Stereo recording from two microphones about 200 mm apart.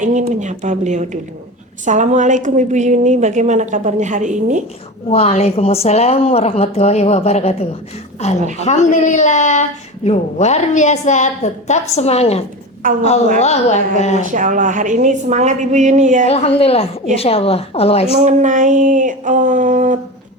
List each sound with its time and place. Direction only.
0.0 s a woman's voice: 35° right (ahead or behind)
5.1 s speech: 30° left (ahead or behind)
12.8 s a woman's voice: 45° right (ahead or behind)
13.4 s speech: 35° left (ahead or behind)
14.2 s a woman's voice: 40° right (ahead or behind)
16.2 s speech: 30° left (ahead or behind)
18.2 s a woman's voice: 35° right (ahead or behind)